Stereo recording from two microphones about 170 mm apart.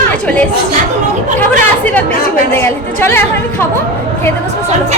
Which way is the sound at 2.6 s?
15° left (ahead or behind).